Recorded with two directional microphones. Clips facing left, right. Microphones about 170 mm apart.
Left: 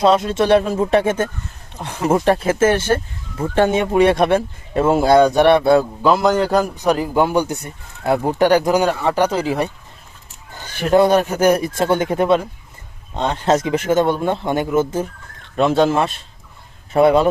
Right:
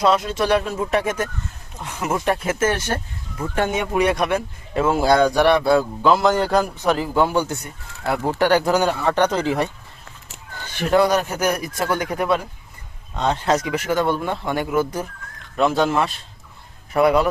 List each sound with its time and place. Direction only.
0.0 s speech: 25° left (ahead or behind)